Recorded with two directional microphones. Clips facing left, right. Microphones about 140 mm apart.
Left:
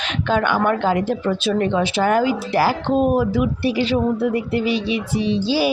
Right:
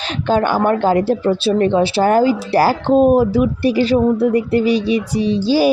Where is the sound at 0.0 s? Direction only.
35° right (ahead or behind).